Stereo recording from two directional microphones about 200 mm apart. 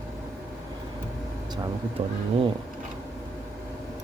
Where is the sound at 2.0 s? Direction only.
35° right (ahead or behind).